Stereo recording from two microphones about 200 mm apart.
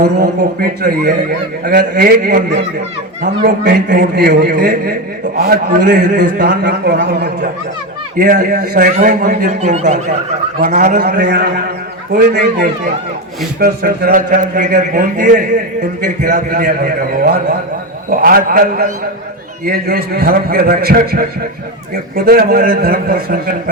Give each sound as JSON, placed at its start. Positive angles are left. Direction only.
{"t": 0.0, "sound": "a man's voice", "side_deg": -50}